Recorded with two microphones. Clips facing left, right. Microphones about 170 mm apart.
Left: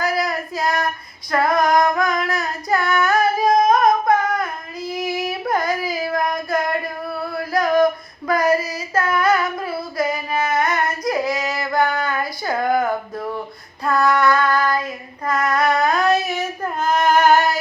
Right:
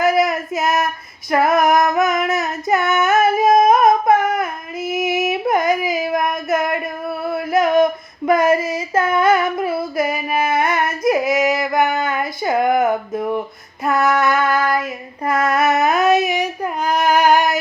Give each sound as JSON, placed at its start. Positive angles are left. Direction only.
{"t": 0.0, "sound": "child singing", "side_deg": -20}
{"t": 1.3, "sound": "female singing", "side_deg": -25}
{"t": 15.2, "sound": "child singing", "side_deg": -25}